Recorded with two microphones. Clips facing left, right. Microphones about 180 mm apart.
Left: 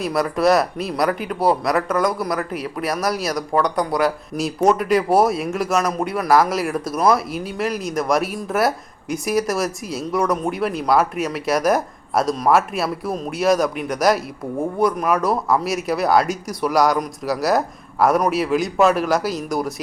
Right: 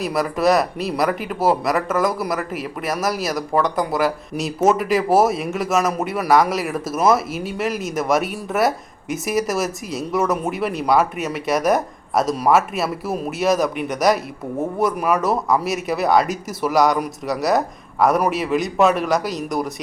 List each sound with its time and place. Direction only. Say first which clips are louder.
0.0 s speech: left 1 dB; centre (ahead or behind)